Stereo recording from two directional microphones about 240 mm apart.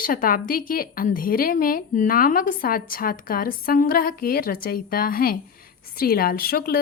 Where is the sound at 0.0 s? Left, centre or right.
Left.